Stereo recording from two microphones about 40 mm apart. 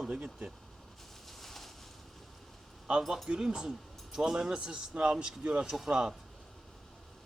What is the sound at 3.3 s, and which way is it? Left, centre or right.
Speech, centre.